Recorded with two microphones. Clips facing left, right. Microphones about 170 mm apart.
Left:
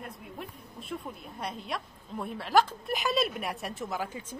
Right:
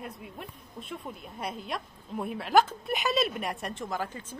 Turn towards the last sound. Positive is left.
turn(degrees=10)  # may be behind; listen again after turning